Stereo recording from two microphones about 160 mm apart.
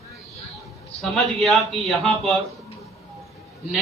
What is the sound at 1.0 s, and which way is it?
A man's voice, centre (ahead or behind).